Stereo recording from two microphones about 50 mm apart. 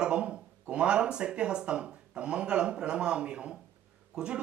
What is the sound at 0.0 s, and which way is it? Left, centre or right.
Speech, centre.